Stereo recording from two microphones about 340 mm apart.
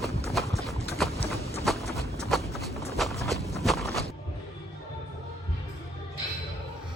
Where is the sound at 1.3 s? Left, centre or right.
Centre.